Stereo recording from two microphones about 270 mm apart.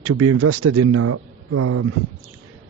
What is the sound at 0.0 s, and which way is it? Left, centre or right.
Speech, right.